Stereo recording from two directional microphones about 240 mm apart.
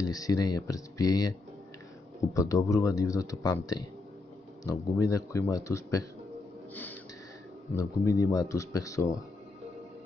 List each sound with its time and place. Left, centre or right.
0.0 s speech: centre
2.3 s speech: centre
6.7 s gasp: centre
7.7 s speech: centre